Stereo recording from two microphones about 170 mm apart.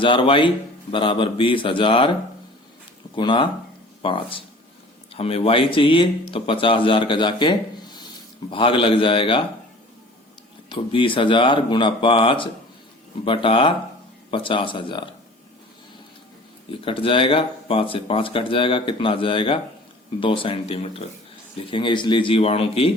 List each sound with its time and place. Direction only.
0.0 s speech: 30° left (ahead or behind)
3.2 s speech: 25° left (ahead or behind)
10.7 s speech: 30° left (ahead or behind)
16.8 s speech: 30° left (ahead or behind)